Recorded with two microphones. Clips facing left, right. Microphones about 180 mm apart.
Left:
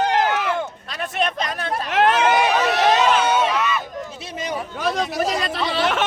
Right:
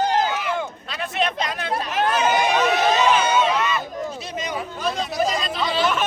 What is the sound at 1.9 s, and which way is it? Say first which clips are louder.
Crowd: left 4 dB; 80° left.